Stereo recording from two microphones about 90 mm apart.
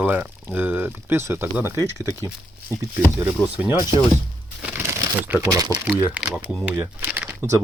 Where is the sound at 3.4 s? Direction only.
5° left (ahead or behind).